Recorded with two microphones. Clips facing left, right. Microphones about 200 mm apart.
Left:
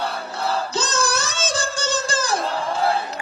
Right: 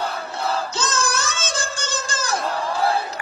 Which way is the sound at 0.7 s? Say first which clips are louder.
Left 1 dB; 35° left (ahead or behind).